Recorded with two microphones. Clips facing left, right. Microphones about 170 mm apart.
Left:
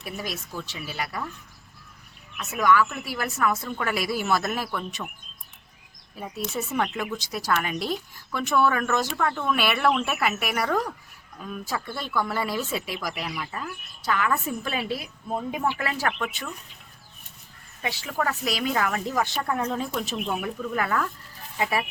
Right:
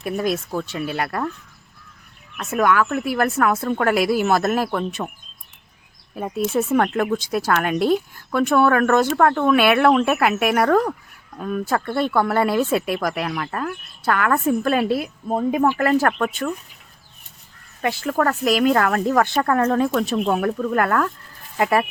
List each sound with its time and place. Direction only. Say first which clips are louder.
0.0 s speech: right 11 dB; 55° right (ahead or behind)
2.4 s a woman's voice: right 3 dB; 55° right (ahead or behind)
6.1 s speech: right 10 dB; 55° right (ahead or behind)
17.8 s speech: right 8 dB; 55° right (ahead or behind)